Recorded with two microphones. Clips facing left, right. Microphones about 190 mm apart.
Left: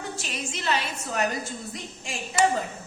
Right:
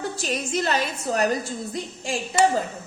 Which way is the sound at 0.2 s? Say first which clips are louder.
Right 9 dB; 45° right (ahead or behind).